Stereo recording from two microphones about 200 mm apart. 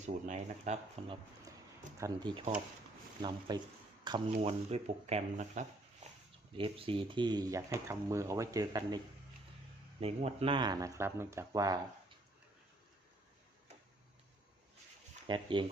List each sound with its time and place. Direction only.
0.0 s speech: 35° right (ahead or behind)
2.0 s speech: 20° right (ahead or behind)
10.0 s speech: 30° right (ahead or behind)
15.3 s speech: 25° right (ahead or behind)